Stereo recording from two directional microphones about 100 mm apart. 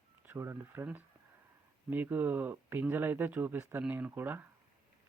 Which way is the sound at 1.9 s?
20° right (ahead or behind).